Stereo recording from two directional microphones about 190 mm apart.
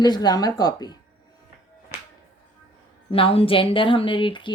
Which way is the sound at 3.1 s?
30° left (ahead or behind).